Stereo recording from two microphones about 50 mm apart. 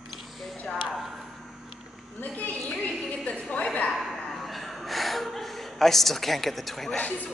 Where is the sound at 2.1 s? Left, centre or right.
Left.